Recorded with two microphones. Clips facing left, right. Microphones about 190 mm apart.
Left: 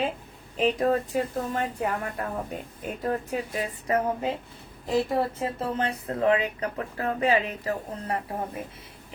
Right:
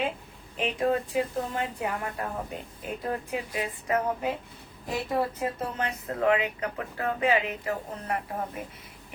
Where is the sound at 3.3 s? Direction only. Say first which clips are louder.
Left 2 dB; 40° left (ahead or behind).